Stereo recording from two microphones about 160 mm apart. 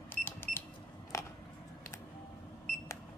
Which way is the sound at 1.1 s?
20° left (ahead or behind).